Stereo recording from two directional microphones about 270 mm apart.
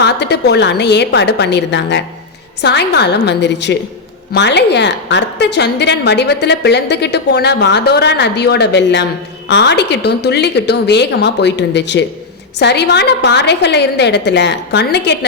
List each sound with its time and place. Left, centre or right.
0.0 s a woman's voice: left